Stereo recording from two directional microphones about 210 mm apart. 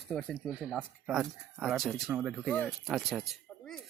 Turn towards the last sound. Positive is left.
turn(degrees=0)  # may be behind; listen again after turning